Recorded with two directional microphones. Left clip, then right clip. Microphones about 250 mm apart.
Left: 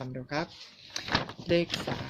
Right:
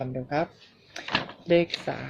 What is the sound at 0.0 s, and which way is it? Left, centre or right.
Speech, left.